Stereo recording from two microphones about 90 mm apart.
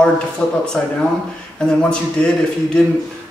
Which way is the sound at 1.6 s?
10° left (ahead or behind).